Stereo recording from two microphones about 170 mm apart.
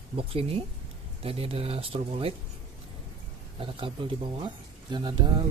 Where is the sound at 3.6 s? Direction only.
30° right (ahead or behind).